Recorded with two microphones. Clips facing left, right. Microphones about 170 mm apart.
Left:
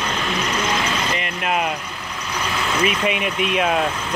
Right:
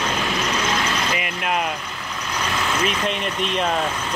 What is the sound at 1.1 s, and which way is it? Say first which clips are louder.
Vehicle: left 1 dB; centre (ahead or behind).